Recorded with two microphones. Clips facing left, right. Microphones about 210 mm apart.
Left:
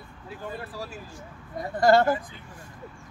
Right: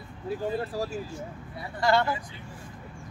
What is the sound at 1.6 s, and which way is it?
Speech, 45° left (ahead or behind).